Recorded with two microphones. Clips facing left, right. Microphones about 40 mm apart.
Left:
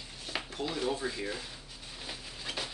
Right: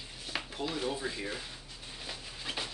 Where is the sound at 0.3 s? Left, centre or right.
Centre.